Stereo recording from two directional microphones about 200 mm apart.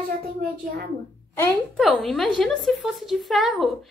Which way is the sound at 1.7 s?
Centre (ahead or behind).